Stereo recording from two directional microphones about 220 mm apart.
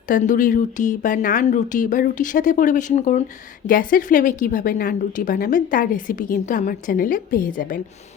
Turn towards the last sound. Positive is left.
turn(degrees=40)  # may be behind; listen again after turning